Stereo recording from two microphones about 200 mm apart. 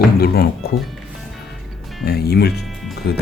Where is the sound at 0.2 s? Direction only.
50° left (ahead or behind).